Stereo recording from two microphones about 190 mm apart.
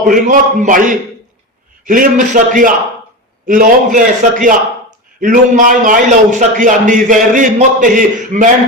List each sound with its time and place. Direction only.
0.0 s a man's voice: 45° right (ahead or behind)